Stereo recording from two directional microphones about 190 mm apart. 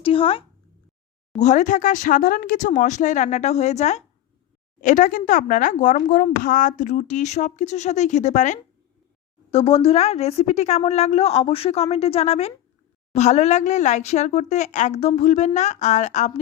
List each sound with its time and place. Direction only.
0.0 s speech: 30° left (ahead or behind)
1.4 s speech: 40° left (ahead or behind)